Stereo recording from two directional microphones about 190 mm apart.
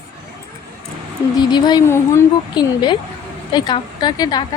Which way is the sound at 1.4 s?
20° left (ahead or behind).